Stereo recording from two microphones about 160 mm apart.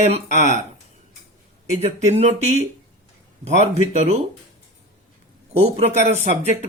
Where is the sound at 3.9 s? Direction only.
40° right (ahead or behind).